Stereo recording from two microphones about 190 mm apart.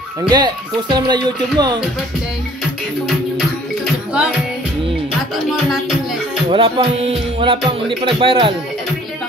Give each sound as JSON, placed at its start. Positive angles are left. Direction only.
{"t": 0.2, "sound": "music", "side_deg": -25}
{"t": 3.3, "sound": "music", "side_deg": -5}
{"t": 6.5, "sound": "music", "side_deg": -25}